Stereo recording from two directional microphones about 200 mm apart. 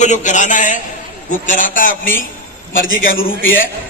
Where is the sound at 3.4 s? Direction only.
80° left.